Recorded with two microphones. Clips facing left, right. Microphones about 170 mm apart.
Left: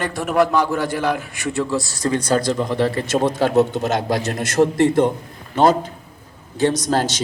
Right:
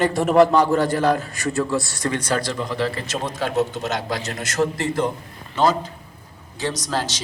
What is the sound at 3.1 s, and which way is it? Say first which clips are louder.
A man's voice: left 8 dB; 55° left (ahead or behind).